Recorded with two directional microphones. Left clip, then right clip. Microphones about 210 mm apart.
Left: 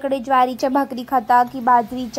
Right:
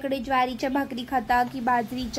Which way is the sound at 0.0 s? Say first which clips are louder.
Left 7 dB; 15° left (ahead or behind).